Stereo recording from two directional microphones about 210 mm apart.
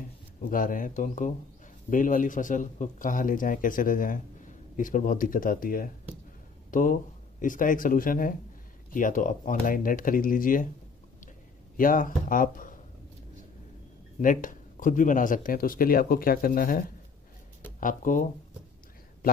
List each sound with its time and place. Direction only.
0.4 s speech: 40° left (ahead or behind)
11.7 s speech: 40° left (ahead or behind)
14.2 s speech: 40° left (ahead or behind)